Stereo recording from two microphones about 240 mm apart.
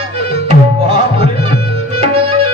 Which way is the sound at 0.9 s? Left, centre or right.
Right.